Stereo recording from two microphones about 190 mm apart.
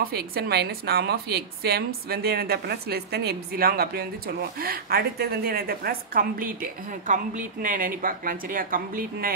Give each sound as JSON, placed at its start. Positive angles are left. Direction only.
{"t": 0.0, "sound": "a woman's voice", "side_deg": -55}